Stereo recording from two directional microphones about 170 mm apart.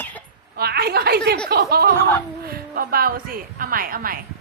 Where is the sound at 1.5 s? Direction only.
65° right (ahead or behind).